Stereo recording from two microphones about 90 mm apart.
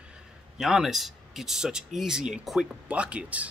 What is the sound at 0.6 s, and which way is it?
Speech, 5° right (ahead or behind).